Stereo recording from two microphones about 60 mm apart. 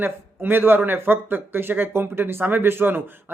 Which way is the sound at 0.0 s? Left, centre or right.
Right.